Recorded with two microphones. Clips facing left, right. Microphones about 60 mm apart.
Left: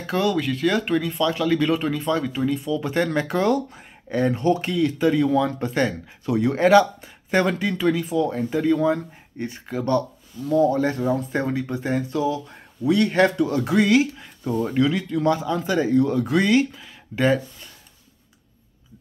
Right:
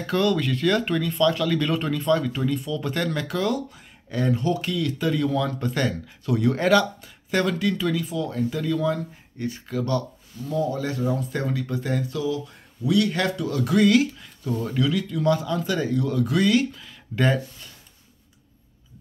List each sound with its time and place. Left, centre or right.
0.0 s speech: centre; by 11.1 s left
11.1 s speech: left
16.8 s a sound: centre